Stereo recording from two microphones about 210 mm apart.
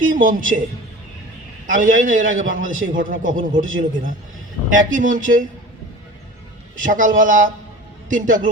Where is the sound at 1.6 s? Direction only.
40° right (ahead or behind).